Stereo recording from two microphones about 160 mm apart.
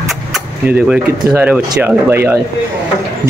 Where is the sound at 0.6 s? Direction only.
5° right (ahead or behind).